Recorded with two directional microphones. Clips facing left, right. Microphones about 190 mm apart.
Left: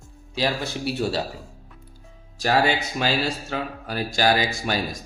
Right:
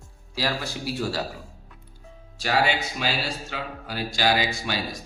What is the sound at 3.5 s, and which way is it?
Speech, 45° left (ahead or behind).